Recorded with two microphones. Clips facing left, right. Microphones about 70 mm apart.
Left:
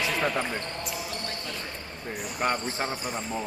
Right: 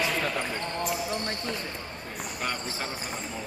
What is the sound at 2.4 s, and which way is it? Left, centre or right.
Speech, left.